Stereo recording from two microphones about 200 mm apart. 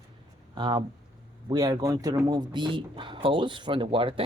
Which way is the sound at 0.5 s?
20° right (ahead or behind).